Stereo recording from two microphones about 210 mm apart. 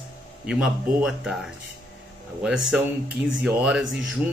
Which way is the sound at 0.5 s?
5° right (ahead or behind).